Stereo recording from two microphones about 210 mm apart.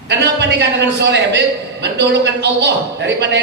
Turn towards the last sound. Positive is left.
turn(degrees=-55)  # may be behind; listen again after turning